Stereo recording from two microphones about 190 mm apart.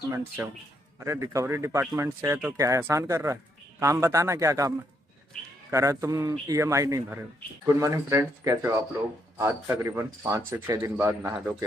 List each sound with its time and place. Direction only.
0.4 s speech: 10° right (ahead or behind)